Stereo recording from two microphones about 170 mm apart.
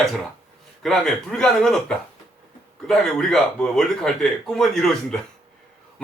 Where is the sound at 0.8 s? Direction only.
5° left (ahead or behind).